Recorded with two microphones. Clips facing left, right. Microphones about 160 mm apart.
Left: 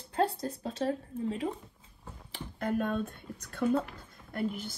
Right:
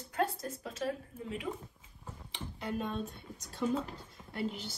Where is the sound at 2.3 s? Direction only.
50° left (ahead or behind).